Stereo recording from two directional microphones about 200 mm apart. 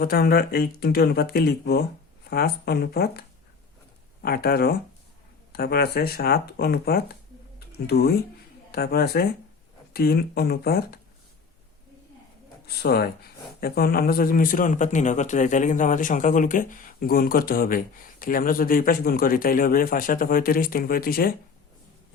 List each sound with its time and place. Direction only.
0.0 s a man's voice: 50° left (ahead or behind)
12.6 s a man's voice: 50° left (ahead or behind)